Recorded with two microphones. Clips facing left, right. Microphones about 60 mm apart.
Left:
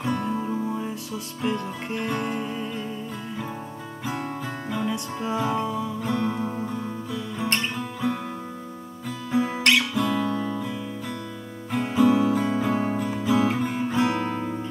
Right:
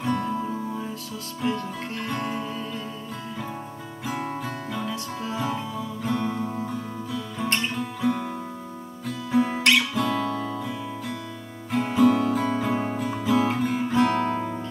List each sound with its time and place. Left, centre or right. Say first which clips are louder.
0.2 s music: left 1 dB; centre
1.4 s speech: even; centre
1.9 s music: left 4 dB; centre
4.0 s music: right 1 dB; centre
6.0 s music: right 1 dB; centre